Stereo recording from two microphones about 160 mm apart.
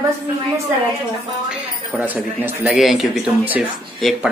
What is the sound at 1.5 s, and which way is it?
A woman's voice, 5° right (ahead or behind).